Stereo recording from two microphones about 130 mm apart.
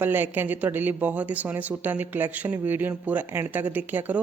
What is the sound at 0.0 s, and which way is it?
Speech, 15° right (ahead or behind).